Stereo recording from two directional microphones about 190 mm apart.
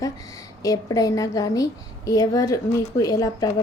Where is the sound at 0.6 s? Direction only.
20° left (ahead or behind).